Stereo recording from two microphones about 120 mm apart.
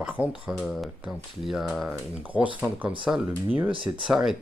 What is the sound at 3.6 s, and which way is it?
Speech, 45° right (ahead or behind).